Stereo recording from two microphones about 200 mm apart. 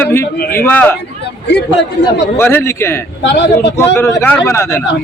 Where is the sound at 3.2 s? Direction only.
60° left (ahead or behind).